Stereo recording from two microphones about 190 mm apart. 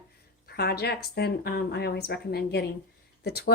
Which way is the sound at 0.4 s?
55° left (ahead or behind).